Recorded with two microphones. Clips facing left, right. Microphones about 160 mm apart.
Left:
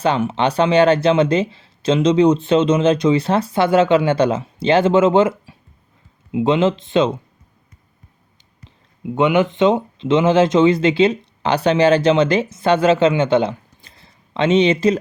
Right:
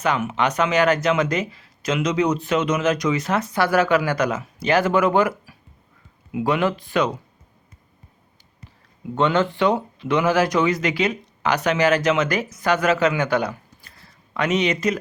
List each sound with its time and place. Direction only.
0.0 s speech: 30° left (ahead or behind)
9.1 s speech: 15° left (ahead or behind)